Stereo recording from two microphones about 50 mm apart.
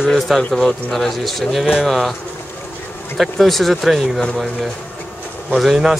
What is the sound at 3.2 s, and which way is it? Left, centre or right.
Speech, centre.